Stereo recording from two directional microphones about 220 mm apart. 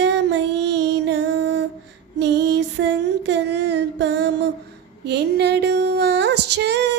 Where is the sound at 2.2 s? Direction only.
50° right (ahead or behind).